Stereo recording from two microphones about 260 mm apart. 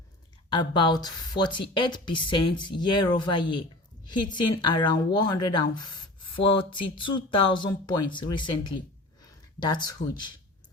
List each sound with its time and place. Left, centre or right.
0.5 s speech: centre
4.6 s speech: centre